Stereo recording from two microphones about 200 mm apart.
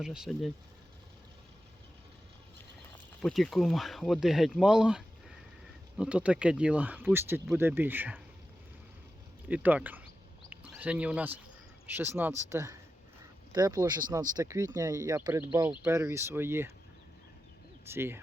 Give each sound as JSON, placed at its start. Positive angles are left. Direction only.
{"t": 0.0, "sound": "speech", "side_deg": -5}
{"t": 3.2, "sound": "speech", "side_deg": 0}
{"t": 9.5, "sound": "speech", "side_deg": -5}
{"t": 17.8, "sound": "speech", "side_deg": -10}